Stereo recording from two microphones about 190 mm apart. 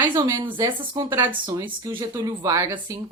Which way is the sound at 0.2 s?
25° right (ahead or behind).